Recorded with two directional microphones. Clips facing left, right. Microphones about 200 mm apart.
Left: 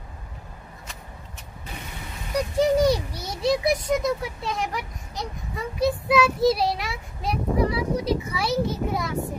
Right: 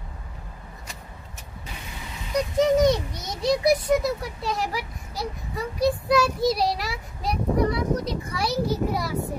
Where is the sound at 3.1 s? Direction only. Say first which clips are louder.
Left 1 dB; 30° left (ahead or behind).